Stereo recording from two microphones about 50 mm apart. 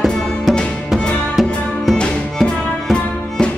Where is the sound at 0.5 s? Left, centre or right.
Centre.